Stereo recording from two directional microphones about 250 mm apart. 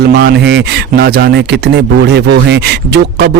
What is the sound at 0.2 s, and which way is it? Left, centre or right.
A man's voice, right.